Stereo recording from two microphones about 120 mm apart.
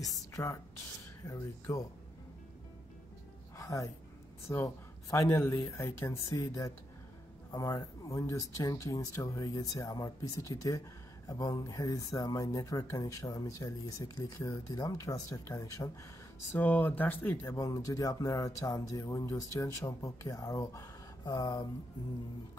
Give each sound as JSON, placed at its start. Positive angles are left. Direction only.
{"t": 0.3, "sound": "a sound", "side_deg": 25}
{"t": 1.2, "sound": "speech", "side_deg": 30}
{"t": 3.5, "sound": "music", "side_deg": 25}
{"t": 4.5, "sound": "speech", "side_deg": 20}
{"t": 16.5, "sound": "speech", "side_deg": 15}
{"t": 17.6, "sound": "speech", "side_deg": 30}
{"t": 21.2, "sound": "a sound", "side_deg": 35}